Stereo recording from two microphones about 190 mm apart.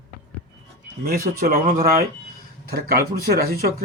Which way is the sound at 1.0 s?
50° right (ahead or behind).